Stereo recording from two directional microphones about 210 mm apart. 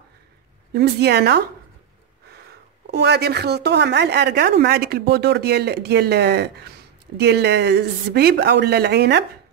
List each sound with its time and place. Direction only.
0.7 s speech: 50° right (ahead or behind)
2.9 s speech: 50° right (ahead or behind)